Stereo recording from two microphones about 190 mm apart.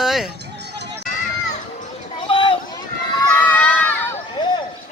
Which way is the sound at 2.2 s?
25° left (ahead or behind).